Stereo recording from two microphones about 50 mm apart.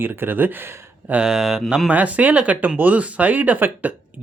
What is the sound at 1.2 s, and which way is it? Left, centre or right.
Speech, centre.